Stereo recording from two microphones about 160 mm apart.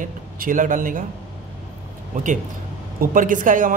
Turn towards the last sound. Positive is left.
turn(degrees=-55)  # may be behind; listen again after turning